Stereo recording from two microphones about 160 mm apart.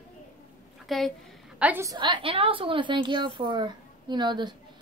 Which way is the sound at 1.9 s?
30° right (ahead or behind).